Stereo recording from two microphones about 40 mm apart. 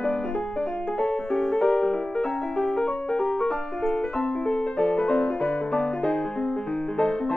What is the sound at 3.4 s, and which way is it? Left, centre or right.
Music, left.